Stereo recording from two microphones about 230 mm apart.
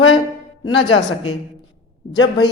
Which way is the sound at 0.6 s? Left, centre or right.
Left.